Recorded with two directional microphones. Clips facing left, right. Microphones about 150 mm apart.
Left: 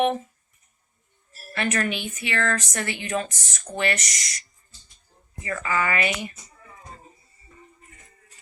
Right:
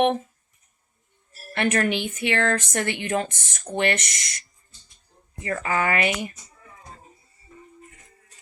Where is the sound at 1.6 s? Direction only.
60° right (ahead or behind).